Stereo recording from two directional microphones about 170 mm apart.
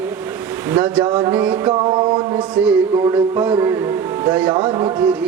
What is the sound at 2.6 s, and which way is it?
Speech, 5° right (ahead or behind).